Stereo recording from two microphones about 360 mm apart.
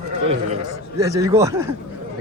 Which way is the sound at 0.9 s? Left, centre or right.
Centre.